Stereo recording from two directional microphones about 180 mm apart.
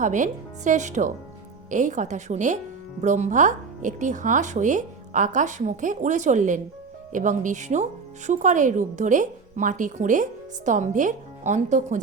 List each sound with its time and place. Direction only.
0.0 s speech: 45° right (ahead or behind)